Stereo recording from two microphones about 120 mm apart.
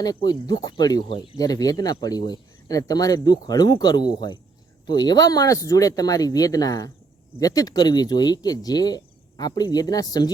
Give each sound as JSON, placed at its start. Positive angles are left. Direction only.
{"t": 0.0, "sound": "speech", "side_deg": 35}
{"t": 1.4, "sound": "speech", "side_deg": 30}